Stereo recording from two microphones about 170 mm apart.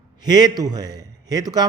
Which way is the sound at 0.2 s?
25° right (ahead or behind).